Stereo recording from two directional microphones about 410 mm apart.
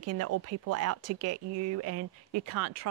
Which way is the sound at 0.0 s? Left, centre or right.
Right.